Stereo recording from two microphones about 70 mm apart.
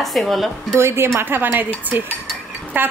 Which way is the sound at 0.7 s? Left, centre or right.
Right.